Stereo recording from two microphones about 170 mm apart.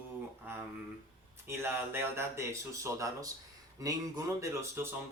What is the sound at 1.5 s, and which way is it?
Speech, 15° right (ahead or behind).